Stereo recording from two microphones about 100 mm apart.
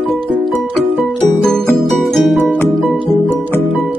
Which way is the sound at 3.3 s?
20° left (ahead or behind).